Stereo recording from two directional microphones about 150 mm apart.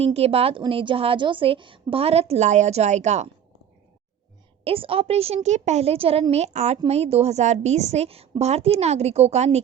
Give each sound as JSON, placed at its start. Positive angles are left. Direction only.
{"t": 0.0, "sound": "a woman's voice", "side_deg": -40}
{"t": 4.6, "sound": "a woman's voice", "side_deg": -40}